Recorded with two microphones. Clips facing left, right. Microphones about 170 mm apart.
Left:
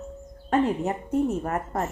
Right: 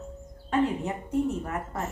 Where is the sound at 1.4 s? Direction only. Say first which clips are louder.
Left 5 dB; 45° left (ahead or behind).